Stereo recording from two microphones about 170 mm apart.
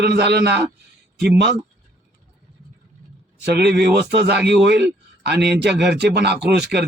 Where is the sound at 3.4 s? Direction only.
75° right (ahead or behind).